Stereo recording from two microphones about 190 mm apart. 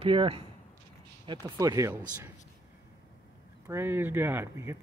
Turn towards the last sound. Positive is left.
turn(degrees=-10)  # may be behind; listen again after turning